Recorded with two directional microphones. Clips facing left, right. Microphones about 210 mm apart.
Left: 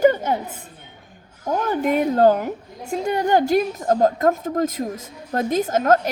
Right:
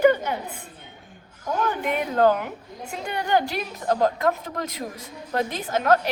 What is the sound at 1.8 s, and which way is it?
A woman's voice, 40° left (ahead or behind).